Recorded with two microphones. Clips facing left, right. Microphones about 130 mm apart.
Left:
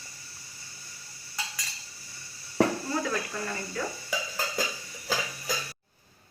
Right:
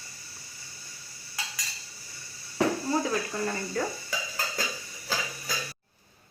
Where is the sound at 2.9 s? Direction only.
25° right (ahead or behind).